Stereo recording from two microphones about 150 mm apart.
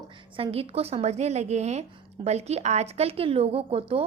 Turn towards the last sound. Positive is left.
turn(degrees=-40)  # may be behind; listen again after turning